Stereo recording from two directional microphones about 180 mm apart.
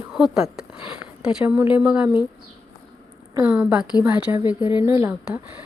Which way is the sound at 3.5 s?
5° right (ahead or behind).